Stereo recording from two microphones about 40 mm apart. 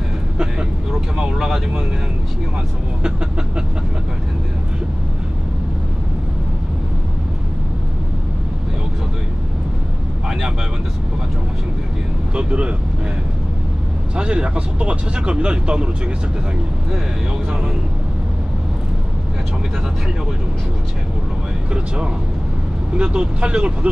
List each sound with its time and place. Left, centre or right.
1.1 s speech: centre
12.4 s speech: right
14.1 s speech: right
21.7 s speech: right